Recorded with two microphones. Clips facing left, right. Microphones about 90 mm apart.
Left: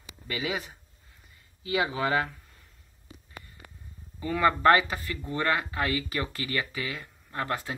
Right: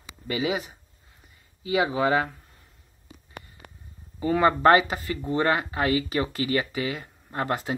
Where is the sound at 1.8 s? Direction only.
20° right (ahead or behind).